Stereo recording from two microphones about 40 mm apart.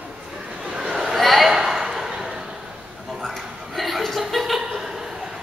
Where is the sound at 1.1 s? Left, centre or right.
Centre.